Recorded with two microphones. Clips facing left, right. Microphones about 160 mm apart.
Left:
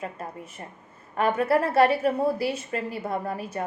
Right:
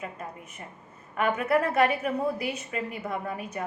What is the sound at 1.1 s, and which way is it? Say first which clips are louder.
A woman's voice: left 2 dB; 35° left (ahead or behind).